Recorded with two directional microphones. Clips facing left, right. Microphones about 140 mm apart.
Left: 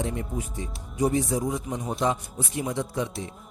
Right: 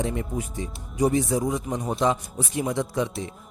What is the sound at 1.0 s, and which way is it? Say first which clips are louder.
A man's voice: right 2 dB; 90° right.